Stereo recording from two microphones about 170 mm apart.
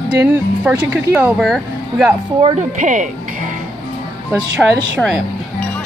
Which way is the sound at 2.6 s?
45° right (ahead or behind).